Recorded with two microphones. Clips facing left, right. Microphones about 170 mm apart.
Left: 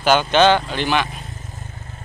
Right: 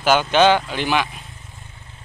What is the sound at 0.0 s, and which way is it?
Speech, 5° right (ahead or behind).